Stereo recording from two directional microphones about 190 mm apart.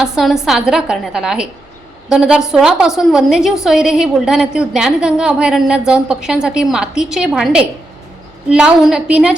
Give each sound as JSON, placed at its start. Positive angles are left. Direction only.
{"t": 0.0, "sound": "a woman's voice", "side_deg": 0}